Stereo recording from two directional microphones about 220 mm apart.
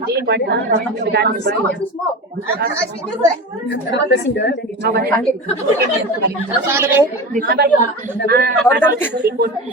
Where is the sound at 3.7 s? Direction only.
50° left (ahead or behind).